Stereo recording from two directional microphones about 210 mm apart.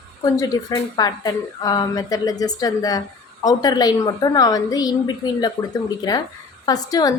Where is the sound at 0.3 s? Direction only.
15° left (ahead or behind).